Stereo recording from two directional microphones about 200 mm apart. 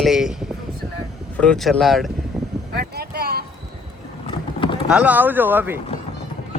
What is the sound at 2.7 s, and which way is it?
Boat, 50° right (ahead or behind).